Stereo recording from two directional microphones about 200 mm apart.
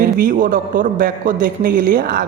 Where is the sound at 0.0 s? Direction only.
45° right (ahead or behind).